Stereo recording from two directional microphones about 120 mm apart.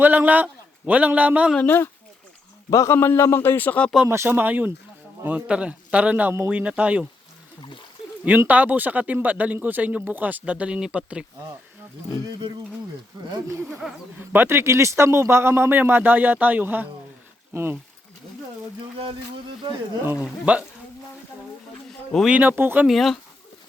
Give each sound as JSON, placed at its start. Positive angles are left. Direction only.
{"t": 0.0, "sound": "speech", "side_deg": -15}
{"t": 1.5, "sound": "a man's voice", "side_deg": 20}
{"t": 4.1, "sound": "speech", "side_deg": -20}
{"t": 8.2, "sound": "speech", "side_deg": -15}
{"t": 12.4, "sound": "speech", "side_deg": -40}
{"t": 13.5, "sound": "speech", "side_deg": -25}
{"t": 18.8, "sound": "a sound", "side_deg": -50}
{"t": 20.2, "sound": "speech", "side_deg": -10}
{"t": 22.3, "sound": "speech", "side_deg": -15}
{"t": 22.9, "sound": "speech", "side_deg": 0}